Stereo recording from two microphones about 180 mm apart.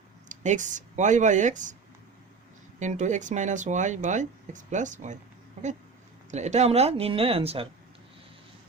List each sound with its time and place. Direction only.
0.3 s speech: 45° right (ahead or behind)
2.7 s speech: 40° right (ahead or behind)
6.3 s speech: 40° right (ahead or behind)